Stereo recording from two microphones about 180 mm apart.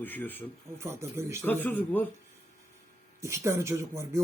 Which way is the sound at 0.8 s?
15° right (ahead or behind).